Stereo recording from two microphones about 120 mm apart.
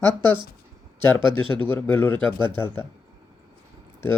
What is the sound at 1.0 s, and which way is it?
A man's voice, 15° left (ahead or behind).